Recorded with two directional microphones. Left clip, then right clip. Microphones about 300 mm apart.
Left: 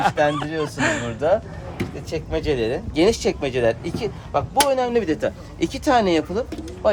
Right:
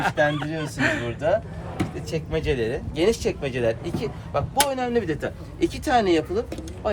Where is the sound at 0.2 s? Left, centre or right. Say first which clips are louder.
Left 3 dB; centre.